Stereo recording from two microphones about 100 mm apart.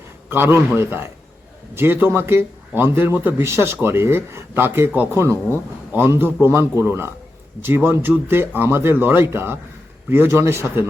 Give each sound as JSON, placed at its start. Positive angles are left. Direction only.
{"t": 0.3, "sound": "speech", "side_deg": -25}